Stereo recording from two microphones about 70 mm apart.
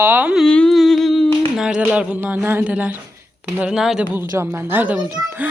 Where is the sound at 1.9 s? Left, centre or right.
Centre.